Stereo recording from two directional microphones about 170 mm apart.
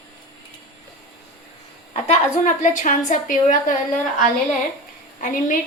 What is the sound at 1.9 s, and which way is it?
A woman's voice, 40° left (ahead or behind).